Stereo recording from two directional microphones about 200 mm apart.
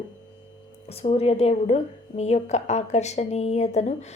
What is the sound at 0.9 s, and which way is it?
A woman's voice, 30° left (ahead or behind).